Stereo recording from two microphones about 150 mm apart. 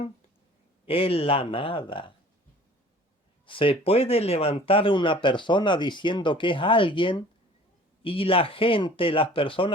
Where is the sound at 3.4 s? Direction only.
35° left (ahead or behind).